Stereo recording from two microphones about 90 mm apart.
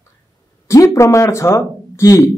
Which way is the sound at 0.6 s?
35° left (ahead or behind).